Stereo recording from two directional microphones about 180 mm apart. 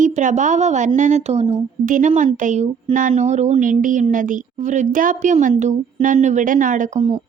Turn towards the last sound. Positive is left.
turn(degrees=-35)  # may be behind; listen again after turning